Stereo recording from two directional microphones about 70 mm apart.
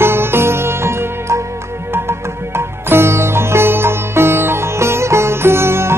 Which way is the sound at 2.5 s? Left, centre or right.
Right.